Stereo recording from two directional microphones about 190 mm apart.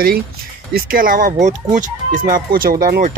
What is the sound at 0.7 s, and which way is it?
Speech, 50° right (ahead or behind).